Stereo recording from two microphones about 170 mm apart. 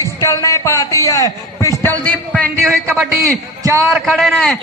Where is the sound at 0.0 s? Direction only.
20° left (ahead or behind).